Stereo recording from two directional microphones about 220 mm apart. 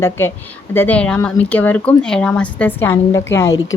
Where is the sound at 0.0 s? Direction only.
10° left (ahead or behind).